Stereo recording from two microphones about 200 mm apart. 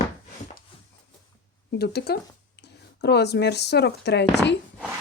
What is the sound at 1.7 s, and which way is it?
Speech, 55° left (ahead or behind).